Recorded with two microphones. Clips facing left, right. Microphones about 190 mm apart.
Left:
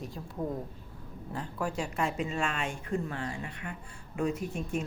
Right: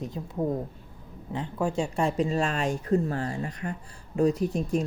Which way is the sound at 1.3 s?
25° right (ahead or behind).